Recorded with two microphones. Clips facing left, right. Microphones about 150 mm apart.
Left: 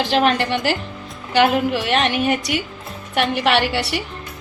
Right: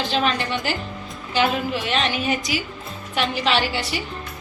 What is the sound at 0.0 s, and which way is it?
Speech, 70° left (ahead or behind).